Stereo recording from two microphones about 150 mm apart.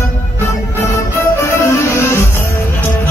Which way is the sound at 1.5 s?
20° left (ahead or behind).